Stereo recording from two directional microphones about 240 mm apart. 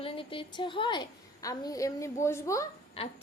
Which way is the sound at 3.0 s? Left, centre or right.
Left.